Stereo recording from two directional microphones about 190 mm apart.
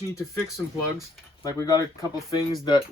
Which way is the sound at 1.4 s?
20° left (ahead or behind).